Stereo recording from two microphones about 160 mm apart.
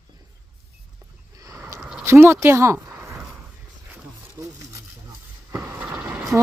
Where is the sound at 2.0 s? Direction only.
15° right (ahead or behind).